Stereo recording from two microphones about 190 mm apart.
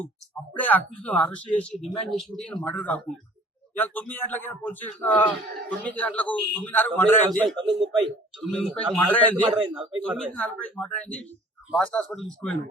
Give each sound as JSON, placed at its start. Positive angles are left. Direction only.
{"t": 0.5, "sound": "a man's voice", "side_deg": 10}
{"t": 9.6, "sound": "a man's voice", "side_deg": -25}
{"t": 10.2, "sound": "speech", "side_deg": 5}